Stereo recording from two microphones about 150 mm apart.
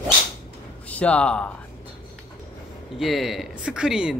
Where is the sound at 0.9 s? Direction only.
10° left (ahead or behind).